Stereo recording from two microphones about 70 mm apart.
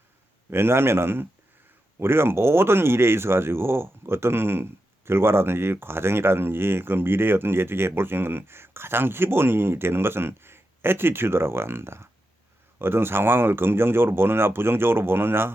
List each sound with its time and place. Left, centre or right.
0.5 s speech: right